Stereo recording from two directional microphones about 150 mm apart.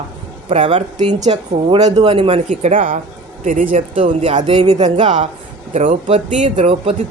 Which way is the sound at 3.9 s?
40° right (ahead or behind).